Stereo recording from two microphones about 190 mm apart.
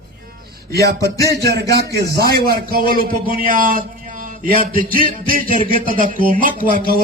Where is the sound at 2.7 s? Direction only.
50° right (ahead or behind).